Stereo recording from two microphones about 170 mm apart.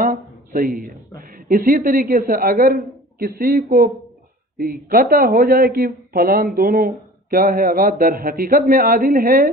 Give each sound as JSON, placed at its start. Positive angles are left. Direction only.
{"t": 0.0, "sound": "a woman's voice", "side_deg": -55}